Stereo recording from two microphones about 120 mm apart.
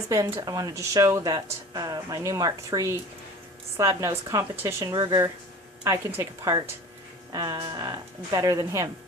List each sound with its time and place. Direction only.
0.1 s speech: 25° right (ahead or behind)
6.4 s speech: 30° right (ahead or behind)